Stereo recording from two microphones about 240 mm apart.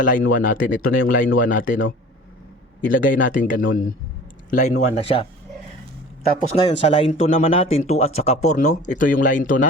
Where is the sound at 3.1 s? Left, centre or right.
Left.